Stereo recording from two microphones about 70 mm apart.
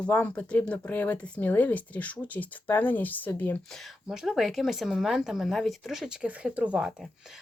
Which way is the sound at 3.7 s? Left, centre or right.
Centre.